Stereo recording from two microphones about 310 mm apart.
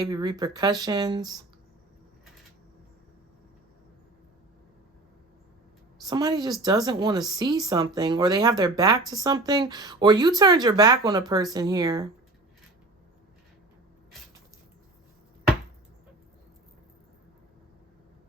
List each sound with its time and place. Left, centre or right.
0.0 s speech: centre
6.0 s speech: centre